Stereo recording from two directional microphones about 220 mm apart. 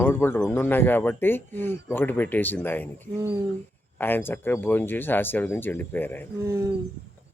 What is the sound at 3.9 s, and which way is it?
Speech, 10° left (ahead or behind).